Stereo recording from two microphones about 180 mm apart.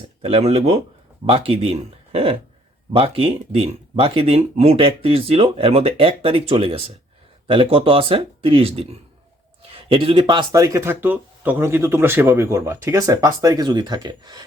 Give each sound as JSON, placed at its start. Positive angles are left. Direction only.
{"t": 0.2, "sound": "speech", "side_deg": -35}